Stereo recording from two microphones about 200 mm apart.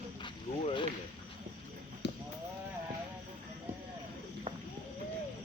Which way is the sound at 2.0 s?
60° left (ahead or behind).